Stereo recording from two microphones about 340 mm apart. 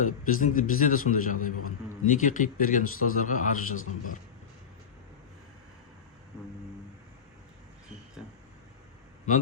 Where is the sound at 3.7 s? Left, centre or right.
Left.